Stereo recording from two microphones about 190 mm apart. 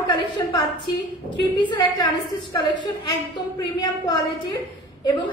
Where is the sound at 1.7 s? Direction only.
20° left (ahead or behind).